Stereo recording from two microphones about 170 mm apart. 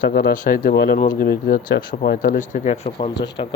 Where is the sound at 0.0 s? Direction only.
60° left (ahead or behind).